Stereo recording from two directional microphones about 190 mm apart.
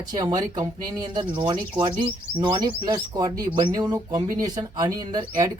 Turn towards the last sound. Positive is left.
turn(degrees=-20)  # may be behind; listen again after turning